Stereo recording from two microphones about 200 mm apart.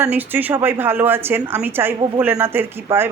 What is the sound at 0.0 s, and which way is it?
Speech, 10° right (ahead or behind).